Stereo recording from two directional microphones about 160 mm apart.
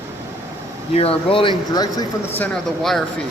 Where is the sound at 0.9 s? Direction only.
35° left (ahead or behind).